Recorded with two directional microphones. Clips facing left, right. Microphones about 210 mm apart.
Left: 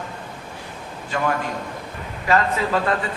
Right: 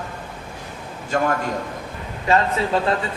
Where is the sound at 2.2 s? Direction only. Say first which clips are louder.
Right 1 dB; 25° right (ahead or behind).